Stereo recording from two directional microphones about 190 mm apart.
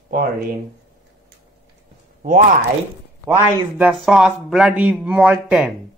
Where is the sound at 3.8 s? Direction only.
5° right (ahead or behind).